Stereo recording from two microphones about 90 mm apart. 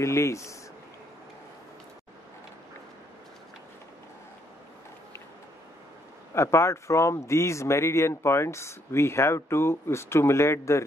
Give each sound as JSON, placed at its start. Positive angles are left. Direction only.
{"t": 0.0, "sound": "speech", "side_deg": 35}
{"t": 6.3, "sound": "speech", "side_deg": 30}